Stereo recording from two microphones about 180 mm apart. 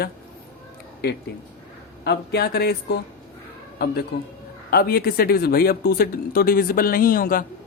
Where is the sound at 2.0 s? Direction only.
65° left (ahead or behind).